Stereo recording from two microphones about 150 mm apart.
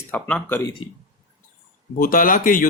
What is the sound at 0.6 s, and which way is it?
Speech, 25° left (ahead or behind).